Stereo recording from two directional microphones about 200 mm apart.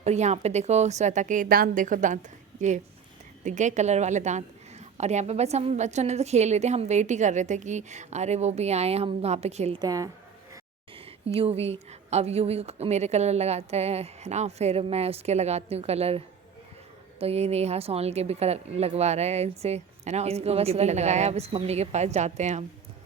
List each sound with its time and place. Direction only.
0.0 s a woman's voice: 35° right (ahead or behind)
9.8 s a woman's voice: 15° right (ahead or behind)
10.9 s a woman's voice: 30° right (ahead or behind)